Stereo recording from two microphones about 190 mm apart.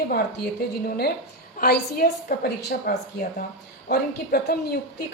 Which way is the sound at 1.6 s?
55° left (ahead or behind).